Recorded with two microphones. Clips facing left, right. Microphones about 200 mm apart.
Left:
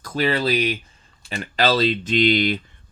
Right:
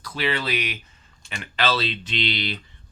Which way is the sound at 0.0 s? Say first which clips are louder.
Left 5 dB; 45° left (ahead or behind).